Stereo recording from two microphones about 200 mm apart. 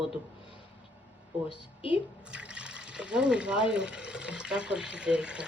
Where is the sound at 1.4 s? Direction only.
25° left (ahead or behind).